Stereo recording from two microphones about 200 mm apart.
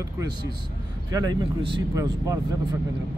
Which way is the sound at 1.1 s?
20° right (ahead or behind).